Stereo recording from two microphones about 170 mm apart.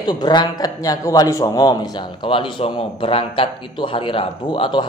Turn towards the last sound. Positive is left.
turn(degrees=30)  # may be behind; listen again after turning